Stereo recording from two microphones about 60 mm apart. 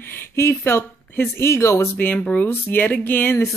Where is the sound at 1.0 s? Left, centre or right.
Left.